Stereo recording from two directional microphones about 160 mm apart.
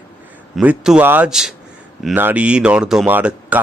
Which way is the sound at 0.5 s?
5° right (ahead or behind).